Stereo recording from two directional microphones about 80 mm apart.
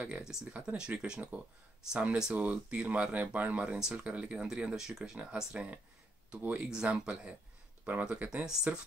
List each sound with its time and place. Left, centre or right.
0.2 s speech: centre